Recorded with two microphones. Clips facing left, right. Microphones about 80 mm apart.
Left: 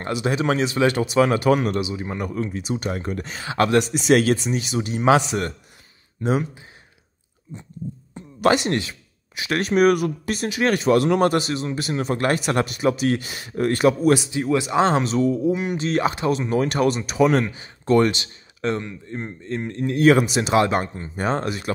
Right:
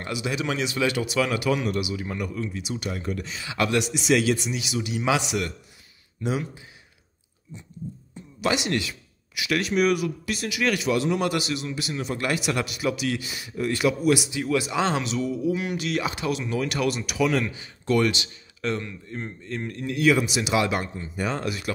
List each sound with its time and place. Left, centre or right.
0.0 s a man's voice: left
1.8 s a man's voice: left
8.1 s a man's voice: left